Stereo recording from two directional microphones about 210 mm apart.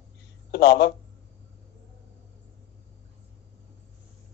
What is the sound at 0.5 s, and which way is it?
Speech, 55° left (ahead or behind).